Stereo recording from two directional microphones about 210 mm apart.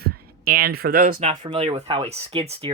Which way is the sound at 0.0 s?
45° right (ahead or behind).